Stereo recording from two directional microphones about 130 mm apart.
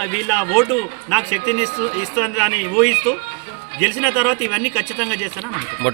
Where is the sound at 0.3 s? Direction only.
10° right (ahead or behind).